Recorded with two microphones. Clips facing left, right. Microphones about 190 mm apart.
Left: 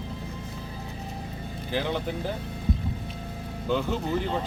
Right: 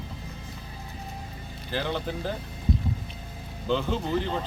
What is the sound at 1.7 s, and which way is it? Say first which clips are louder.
Speech: left 1 dB; 15° left (ahead or behind).